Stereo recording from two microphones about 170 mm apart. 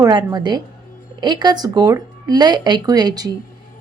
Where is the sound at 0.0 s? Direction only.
25° right (ahead or behind).